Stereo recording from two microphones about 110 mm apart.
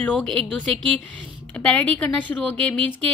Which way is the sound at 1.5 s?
10° left (ahead or behind).